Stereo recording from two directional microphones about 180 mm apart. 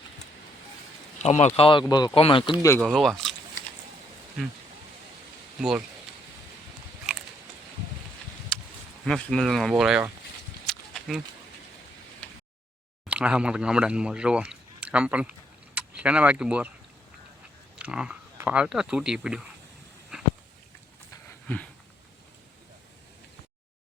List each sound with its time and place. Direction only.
1.2 s speech: 40° left (ahead or behind)
2.8 s speech: centre (ahead or behind)
5.5 s speech: 5° right (ahead or behind)
8.5 s a sound: 5° left (ahead or behind)
9.0 s speech: 5° left (ahead or behind)
10.7 s livestock: centre (ahead or behind)
13.1 s speech: 5° right (ahead or behind)
17.7 s speech: 5° right (ahead or behind)
20.1 s a sound: 5° right (ahead or behind)
21.2 s a sound: 10° left (ahead or behind)